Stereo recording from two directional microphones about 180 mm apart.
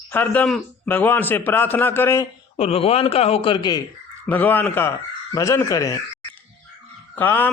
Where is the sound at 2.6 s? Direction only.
35° left (ahead or behind).